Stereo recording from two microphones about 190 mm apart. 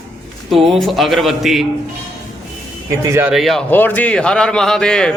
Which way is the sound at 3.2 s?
5° right (ahead or behind).